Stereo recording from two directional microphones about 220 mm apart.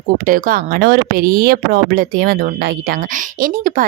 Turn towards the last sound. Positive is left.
turn(degrees=-40)  # may be behind; listen again after turning